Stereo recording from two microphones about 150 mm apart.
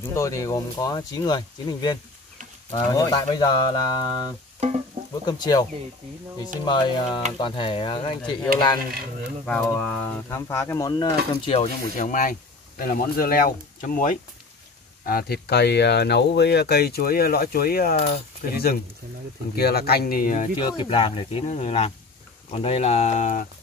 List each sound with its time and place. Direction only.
0.1 s speech: 20° left (ahead or behind)
4.6 s sizzle: 50° right (ahead or behind)
5.2 s speech: 25° left (ahead or behind)
9.5 s speech: 10° left (ahead or behind); by 11.5 s 30° left (ahead or behind)
12.0 s speech: 60° left (ahead or behind)
15.0 s speech: 85° left; by 20.4 s 70° left (ahead or behind)
20.5 s speech: 35° left (ahead or behind); by 23.4 s 55° left (ahead or behind)